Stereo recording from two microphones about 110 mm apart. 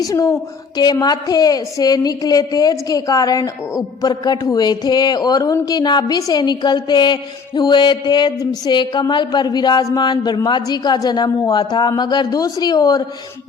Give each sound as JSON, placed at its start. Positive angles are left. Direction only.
{"t": 0.0, "sound": "speech", "side_deg": 30}